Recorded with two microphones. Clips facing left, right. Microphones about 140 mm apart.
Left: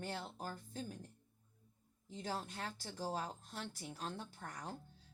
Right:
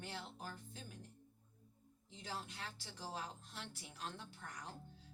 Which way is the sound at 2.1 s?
40° left (ahead or behind).